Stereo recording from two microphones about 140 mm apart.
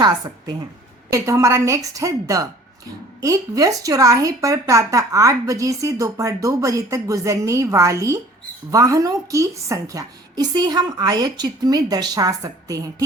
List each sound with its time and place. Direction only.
0.0 s speech: 30° right (ahead or behind)